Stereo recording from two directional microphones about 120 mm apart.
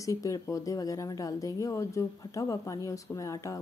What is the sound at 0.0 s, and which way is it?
Speech, 25° left (ahead or behind).